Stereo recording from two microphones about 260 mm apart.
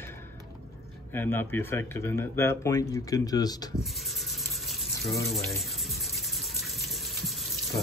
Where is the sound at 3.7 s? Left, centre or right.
Centre.